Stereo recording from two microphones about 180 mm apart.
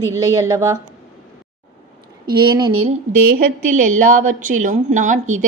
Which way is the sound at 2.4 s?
25° right (ahead or behind).